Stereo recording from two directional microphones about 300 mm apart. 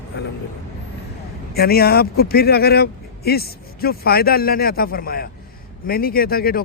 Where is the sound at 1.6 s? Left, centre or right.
Left.